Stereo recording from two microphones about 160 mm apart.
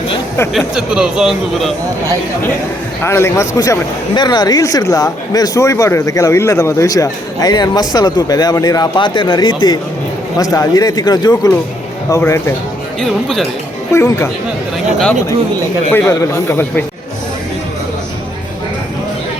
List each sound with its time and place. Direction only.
0.5 s speech: 5° right (ahead or behind)
3.0 s a man's voice: 15° left (ahead or behind)
13.0 s speech: centre (ahead or behind)
13.9 s a man's voice: 15° left (ahead or behind)
15.9 s a man's voice: 15° left (ahead or behind)